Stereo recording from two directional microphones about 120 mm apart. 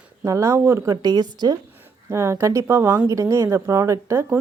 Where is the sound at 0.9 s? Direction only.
35° right (ahead or behind).